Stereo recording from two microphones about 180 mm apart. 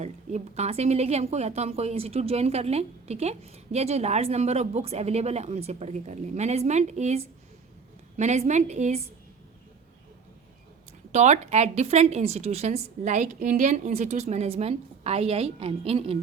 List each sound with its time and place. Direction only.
0.0 s a woman's voice: 40° right (ahead or behind)
11.1 s a woman's voice: 40° right (ahead or behind)